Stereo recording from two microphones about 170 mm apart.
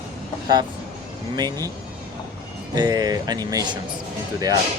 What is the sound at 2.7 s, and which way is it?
Speech, 25° right (ahead or behind).